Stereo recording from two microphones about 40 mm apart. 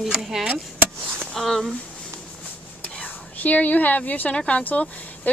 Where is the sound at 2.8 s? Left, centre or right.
Left.